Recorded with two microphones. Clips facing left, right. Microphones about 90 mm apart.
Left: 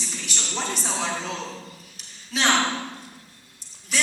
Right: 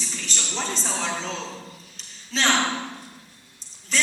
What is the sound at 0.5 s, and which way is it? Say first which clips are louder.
Speech: left 1 dB; 10° left (ahead or behind).